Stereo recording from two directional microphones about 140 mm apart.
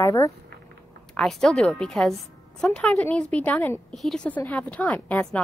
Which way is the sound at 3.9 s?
Centre (ahead or behind).